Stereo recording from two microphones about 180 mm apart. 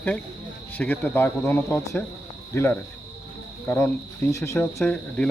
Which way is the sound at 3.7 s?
15° left (ahead or behind).